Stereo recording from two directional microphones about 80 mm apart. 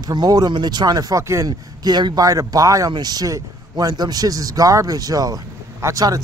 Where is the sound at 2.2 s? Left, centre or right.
Right.